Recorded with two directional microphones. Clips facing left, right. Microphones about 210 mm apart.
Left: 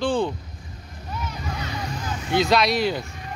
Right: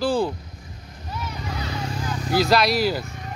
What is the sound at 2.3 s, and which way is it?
Speech, centre (ahead or behind).